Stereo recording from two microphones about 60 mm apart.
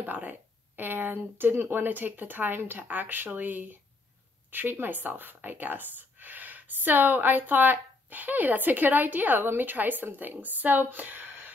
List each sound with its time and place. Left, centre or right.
0.0 s speech: right